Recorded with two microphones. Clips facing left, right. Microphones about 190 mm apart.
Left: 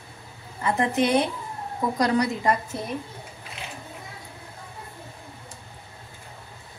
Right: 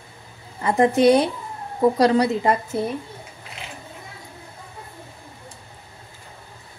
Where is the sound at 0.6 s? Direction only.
35° right (ahead or behind).